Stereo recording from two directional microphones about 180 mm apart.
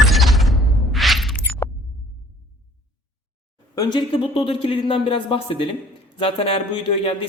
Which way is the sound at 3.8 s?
25° left (ahead or behind).